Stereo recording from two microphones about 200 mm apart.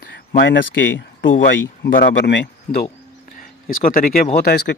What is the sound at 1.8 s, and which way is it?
Speech, 50° left (ahead or behind).